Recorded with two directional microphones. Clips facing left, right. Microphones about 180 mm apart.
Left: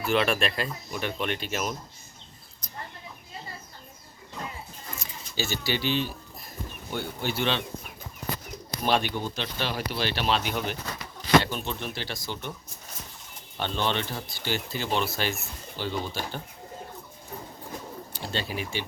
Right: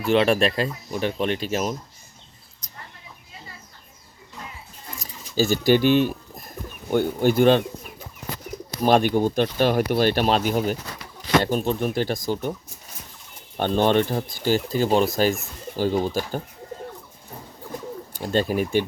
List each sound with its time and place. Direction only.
0.0 s speech: 30° right (ahead or behind)
4.9 s keys jangling: 40° right (ahead or behind)
6.9 s speech: 50° right (ahead or behind)
8.8 s speech: 45° right (ahead or behind)
13.6 s speech: 45° right (ahead or behind)
18.2 s speech: 45° right (ahead or behind)